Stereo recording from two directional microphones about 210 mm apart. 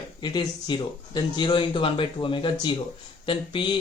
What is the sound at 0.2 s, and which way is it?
Speech, 20° left (ahead or behind).